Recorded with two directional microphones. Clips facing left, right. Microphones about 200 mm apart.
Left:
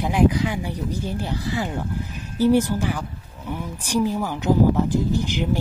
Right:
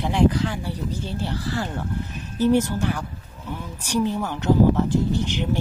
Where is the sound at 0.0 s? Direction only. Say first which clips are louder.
Left 1 dB; 15° left (ahead or behind).